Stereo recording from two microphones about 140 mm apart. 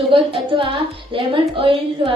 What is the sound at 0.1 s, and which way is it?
A woman's voice, 40° right (ahead or behind).